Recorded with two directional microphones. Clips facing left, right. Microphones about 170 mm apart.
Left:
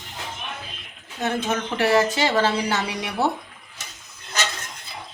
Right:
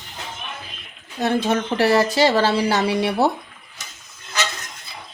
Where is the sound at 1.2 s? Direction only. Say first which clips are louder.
Right 5 dB; 35° right (ahead or behind).